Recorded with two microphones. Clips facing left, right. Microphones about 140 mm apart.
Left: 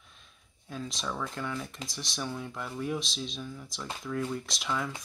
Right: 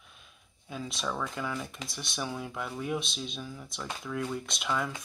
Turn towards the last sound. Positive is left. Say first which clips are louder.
# right 1 dB
turn(degrees=0)  # may be behind; listen again after turning